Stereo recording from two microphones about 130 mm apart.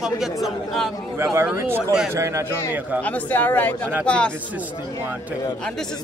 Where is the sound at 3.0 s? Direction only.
10° left (ahead or behind).